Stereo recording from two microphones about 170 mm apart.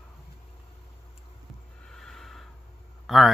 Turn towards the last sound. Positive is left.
turn(degrees=0)  # may be behind; listen again after turning